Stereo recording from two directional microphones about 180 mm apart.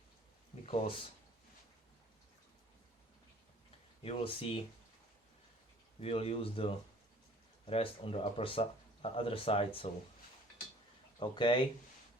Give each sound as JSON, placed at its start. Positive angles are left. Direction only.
{"t": 0.6, "sound": "speech", "side_deg": 35}
{"t": 4.0, "sound": "speech", "side_deg": 30}
{"t": 6.0, "sound": "speech", "side_deg": 30}
{"t": 11.2, "sound": "speech", "side_deg": 25}